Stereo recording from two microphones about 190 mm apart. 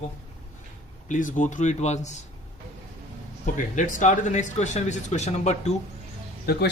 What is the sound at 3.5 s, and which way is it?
Speech, 40° left (ahead or behind).